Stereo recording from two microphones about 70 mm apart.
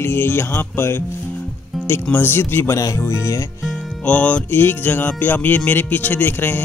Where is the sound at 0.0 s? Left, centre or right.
Left.